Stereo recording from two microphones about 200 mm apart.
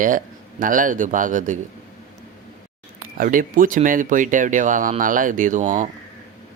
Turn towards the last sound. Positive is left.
turn(degrees=-40)  # may be behind; listen again after turning